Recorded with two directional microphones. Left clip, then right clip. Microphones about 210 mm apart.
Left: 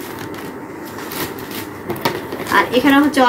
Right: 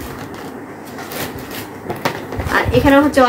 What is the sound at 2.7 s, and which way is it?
Speech, 20° right (ahead or behind).